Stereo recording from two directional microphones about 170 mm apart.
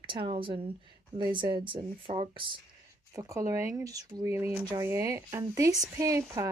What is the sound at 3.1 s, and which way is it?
Speech, 20° right (ahead or behind).